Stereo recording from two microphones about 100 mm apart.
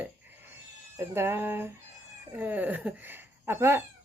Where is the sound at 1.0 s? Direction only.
25° right (ahead or behind).